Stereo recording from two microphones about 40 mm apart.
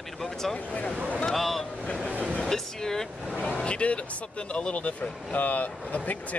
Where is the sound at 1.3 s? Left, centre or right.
Centre.